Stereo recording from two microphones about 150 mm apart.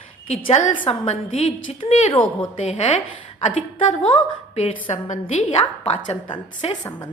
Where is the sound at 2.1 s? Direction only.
35° left (ahead or behind).